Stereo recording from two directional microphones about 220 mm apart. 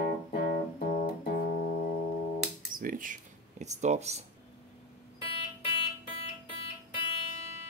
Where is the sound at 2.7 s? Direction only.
40° right (ahead or behind).